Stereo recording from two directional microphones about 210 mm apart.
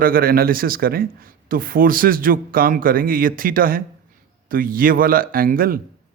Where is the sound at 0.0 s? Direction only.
45° right (ahead or behind).